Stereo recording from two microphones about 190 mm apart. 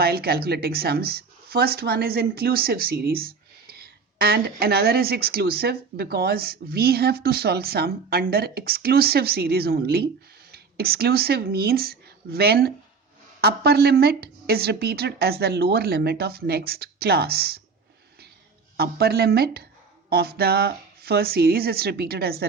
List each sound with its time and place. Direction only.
0.0 s speech: 55° right (ahead or behind)
18.8 s speech: 55° right (ahead or behind)